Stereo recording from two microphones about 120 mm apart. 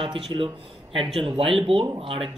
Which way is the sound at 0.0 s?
50° right (ahead or behind).